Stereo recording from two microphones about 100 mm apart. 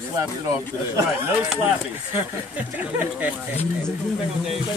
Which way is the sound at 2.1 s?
15° right (ahead or behind).